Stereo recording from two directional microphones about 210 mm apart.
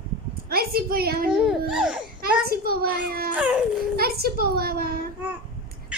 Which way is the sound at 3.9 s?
45° right (ahead or behind).